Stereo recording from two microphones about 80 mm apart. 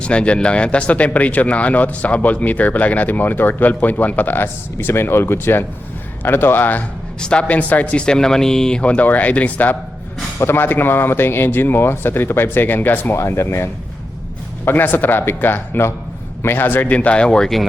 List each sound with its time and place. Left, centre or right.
0.0 s speech: centre
7.2 s speech: centre
10.3 s speech: left
13.1 s speech: left; by 17.7 s centre